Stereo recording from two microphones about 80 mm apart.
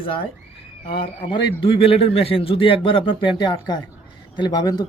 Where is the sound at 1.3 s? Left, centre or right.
Left.